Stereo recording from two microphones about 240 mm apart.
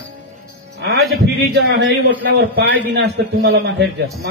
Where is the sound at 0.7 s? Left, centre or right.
Right.